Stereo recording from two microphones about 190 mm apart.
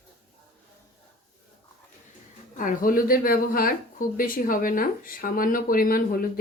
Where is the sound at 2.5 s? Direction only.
45° left (ahead or behind).